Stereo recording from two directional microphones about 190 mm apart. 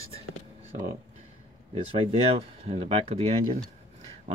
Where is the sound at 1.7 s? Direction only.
30° right (ahead or behind).